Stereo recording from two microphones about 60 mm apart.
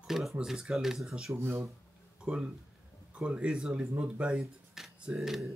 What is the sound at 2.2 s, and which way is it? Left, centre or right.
Speech, centre.